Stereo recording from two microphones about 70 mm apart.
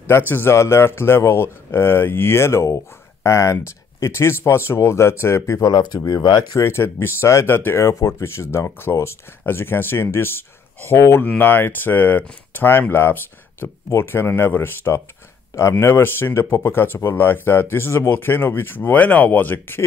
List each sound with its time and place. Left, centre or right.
0.3 s speech: left
5.7 s speech: left
5.9 s speech: left
6.6 s speech: left